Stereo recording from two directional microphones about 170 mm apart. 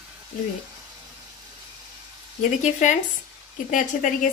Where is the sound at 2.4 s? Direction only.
45° left (ahead or behind).